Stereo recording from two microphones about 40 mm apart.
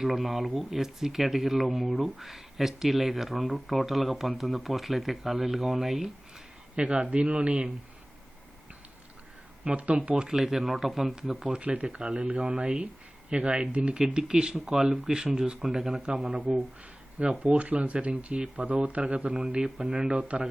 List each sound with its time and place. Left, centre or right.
0.0 s speech: centre
6.7 s speech: right
9.6 s speech: right
10.2 s speech: centre
11.6 s speech: right
13.9 s speech: centre
16.0 s speech: centre; by 18.4 s right
18.6 s speech: right